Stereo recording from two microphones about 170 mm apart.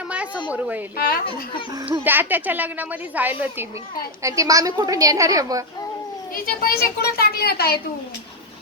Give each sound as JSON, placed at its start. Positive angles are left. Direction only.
{"t": 0.5, "sound": "a woman's voice", "side_deg": -10}
{"t": 0.9, "sound": "a woman's voice", "side_deg": 60}
{"t": 1.9, "sound": "a woman's voice", "side_deg": -10}
{"t": 6.3, "sound": "a woman's voice", "side_deg": 60}